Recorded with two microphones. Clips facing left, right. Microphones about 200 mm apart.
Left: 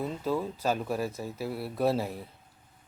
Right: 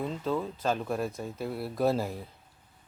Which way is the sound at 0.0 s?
10° left (ahead or behind).